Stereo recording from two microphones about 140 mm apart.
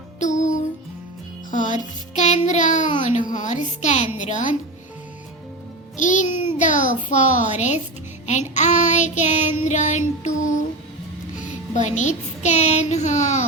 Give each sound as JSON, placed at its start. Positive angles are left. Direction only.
{"t": 0.2, "sound": "music", "side_deg": 60}
{"t": 4.2, "sound": "a child's voice", "side_deg": 60}
{"t": 6.0, "sound": "a child's voice", "side_deg": 60}
{"t": 11.7, "sound": "a child's voice", "side_deg": 55}